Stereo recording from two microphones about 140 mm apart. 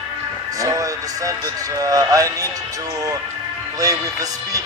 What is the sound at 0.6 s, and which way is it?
Music, 25° right (ahead or behind).